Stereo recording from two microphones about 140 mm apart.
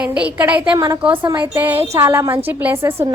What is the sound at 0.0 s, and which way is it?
A woman's voice, 10° right (ahead or behind).